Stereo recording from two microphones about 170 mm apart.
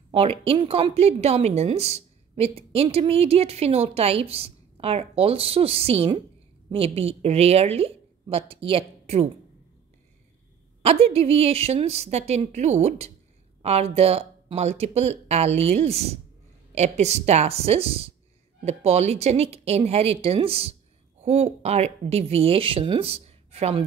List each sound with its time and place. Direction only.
0.1 s a woman's voice: 35° right (ahead or behind)
10.8 s a woman's voice: 35° right (ahead or behind)